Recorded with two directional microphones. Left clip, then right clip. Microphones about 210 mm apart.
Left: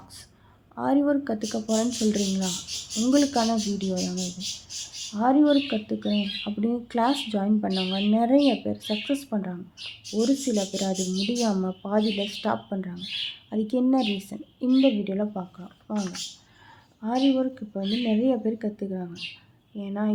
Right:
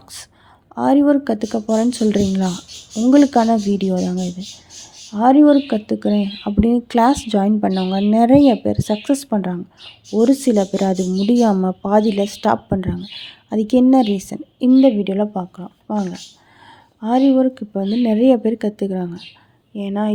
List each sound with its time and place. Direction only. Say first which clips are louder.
0.8 s speech: right 9 dB; 35° right (ahead or behind)